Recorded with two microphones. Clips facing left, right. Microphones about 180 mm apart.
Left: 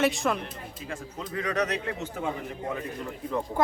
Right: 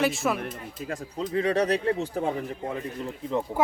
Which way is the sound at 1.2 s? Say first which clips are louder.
Right 5 dB; 30° right (ahead or behind).